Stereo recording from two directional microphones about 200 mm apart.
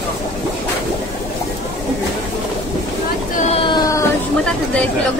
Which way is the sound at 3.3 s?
30° left (ahead or behind).